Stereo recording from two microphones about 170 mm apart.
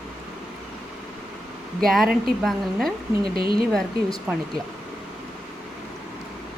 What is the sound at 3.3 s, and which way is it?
Speech, 60° right (ahead or behind).